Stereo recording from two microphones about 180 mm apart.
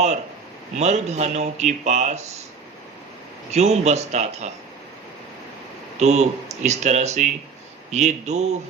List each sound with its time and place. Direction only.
0.8 s speech: 40° right (ahead or behind)
3.5 s speech: 35° right (ahead or behind)
6.0 s speech: 40° right (ahead or behind)